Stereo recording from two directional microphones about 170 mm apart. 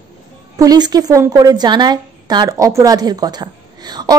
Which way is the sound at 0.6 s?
25° right (ahead or behind).